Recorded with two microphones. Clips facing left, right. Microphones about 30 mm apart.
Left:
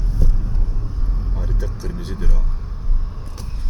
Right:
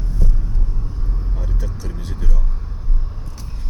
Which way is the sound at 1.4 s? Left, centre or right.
Centre.